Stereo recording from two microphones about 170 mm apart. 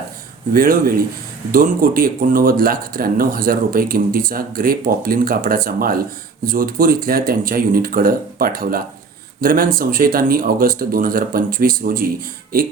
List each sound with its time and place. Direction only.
0.5 s speech: 55° right (ahead or behind)